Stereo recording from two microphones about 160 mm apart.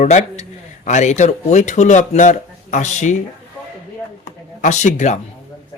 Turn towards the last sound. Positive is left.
turn(degrees=45)  # may be behind; listen again after turning